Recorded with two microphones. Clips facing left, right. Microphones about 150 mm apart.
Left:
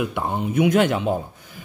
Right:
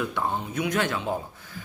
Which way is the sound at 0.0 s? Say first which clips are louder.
Left 4 dB; 15° left (ahead or behind).